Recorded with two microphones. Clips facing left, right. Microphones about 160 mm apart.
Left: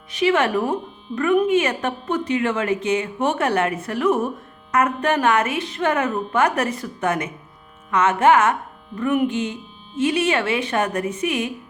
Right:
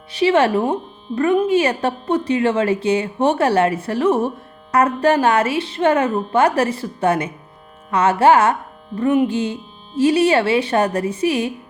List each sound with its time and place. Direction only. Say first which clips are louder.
0.1 s speech: right 4 dB; 30° right (ahead or behind)